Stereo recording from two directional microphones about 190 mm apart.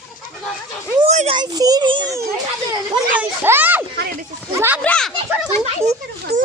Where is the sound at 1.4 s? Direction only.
20° right (ahead or behind).